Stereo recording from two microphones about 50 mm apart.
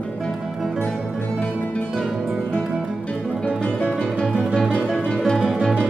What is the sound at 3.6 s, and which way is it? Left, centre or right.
Music, left.